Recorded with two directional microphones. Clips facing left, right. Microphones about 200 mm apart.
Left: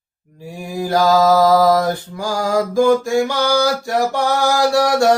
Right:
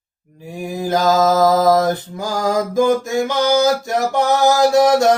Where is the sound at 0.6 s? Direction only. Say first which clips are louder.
Left 1 dB; 20° right (ahead or behind).